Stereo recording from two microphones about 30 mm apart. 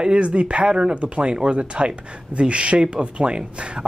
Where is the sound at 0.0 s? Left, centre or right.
Right.